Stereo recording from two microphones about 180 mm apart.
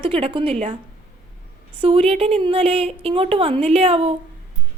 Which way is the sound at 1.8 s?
30° right (ahead or behind).